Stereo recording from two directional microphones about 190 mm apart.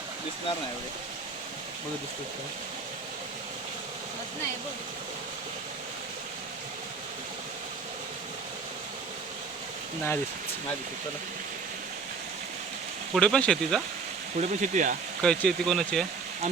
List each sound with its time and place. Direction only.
13.1 s speech: 5° left (ahead or behind)
14.3 s speech: 40° right (ahead or behind)
15.2 s speech: 5° left (ahead or behind)